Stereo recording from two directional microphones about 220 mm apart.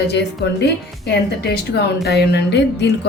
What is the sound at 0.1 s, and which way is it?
A woman's voice, 50° left (ahead or behind).